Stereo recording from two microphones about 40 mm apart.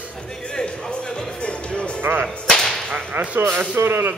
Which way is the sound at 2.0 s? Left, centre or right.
Right.